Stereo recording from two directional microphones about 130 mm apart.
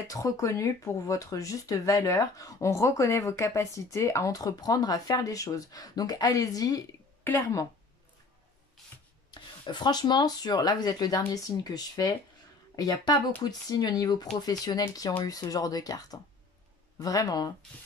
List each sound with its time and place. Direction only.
0.1 s speech: 25° left (ahead or behind)
9.3 s speech: 35° left (ahead or behind)